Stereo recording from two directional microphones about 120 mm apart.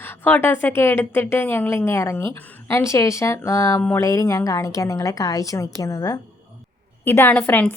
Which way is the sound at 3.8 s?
15° left (ahead or behind).